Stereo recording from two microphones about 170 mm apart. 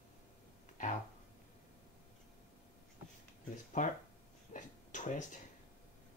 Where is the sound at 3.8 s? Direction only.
50° left (ahead or behind).